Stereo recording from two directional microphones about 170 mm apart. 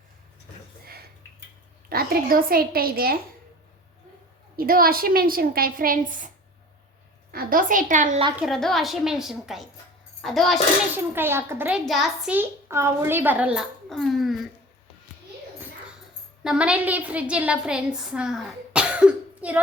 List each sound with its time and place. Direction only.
1.9 s a woman's voice: 60° right (ahead or behind)
4.5 s a woman's voice: 60° right (ahead or behind)
8.4 s a child's voice: centre (ahead or behind)
10.9 s a child's voice: 15° right (ahead or behind)
11.9 s a child's voice: centre (ahead or behind)
16.4 s a woman's voice: 5° right (ahead or behind)